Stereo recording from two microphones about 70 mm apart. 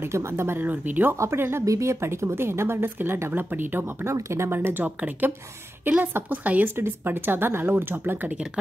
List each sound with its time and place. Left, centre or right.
0.0 s speech: right
1.1 s speech: right
4.1 s a woman's voice: right